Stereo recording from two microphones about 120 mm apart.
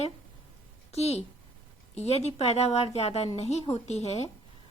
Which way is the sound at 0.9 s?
60° left (ahead or behind).